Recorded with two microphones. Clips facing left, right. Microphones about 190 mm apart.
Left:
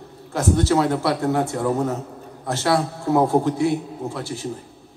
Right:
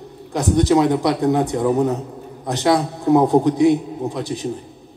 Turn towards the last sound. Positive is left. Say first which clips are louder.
# right 4 dB
turn(degrees=-20)  # may be behind; listen again after turning